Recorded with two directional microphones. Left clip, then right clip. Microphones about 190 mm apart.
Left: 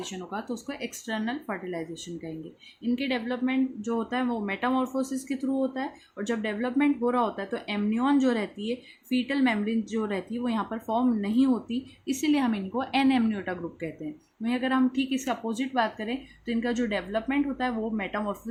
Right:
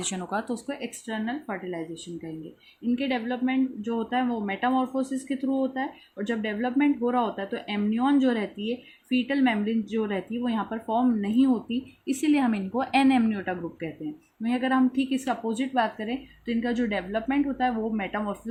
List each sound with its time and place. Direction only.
0.0 s speech: 35° right (ahead or behind)
0.3 s speech: 25° right (ahead or behind)
0.7 s a woman's voice: 5° right (ahead or behind)